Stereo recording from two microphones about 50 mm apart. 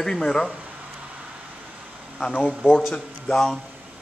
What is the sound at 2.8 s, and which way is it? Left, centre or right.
Speech, centre.